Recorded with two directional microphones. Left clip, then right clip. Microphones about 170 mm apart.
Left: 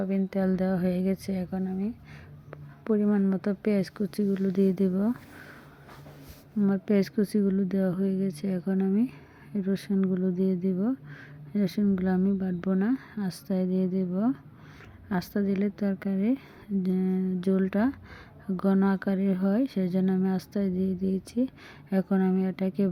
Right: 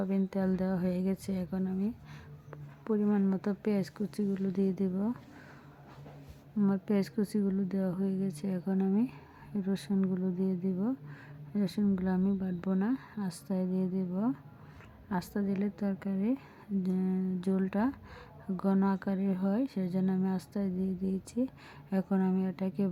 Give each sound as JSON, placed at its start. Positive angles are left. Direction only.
{"t": 0.0, "sound": "speech", "side_deg": 10}
{"t": 2.5, "sound": "speech", "side_deg": 20}
{"t": 6.6, "sound": "speech", "side_deg": 15}